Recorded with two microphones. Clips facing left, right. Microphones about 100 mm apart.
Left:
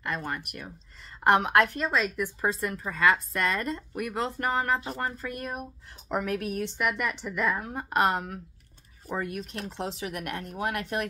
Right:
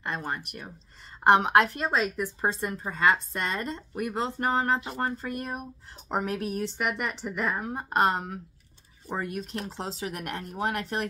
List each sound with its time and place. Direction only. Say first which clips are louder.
0.3 s a woman's voice: right 1 dB; 30° right (ahead or behind)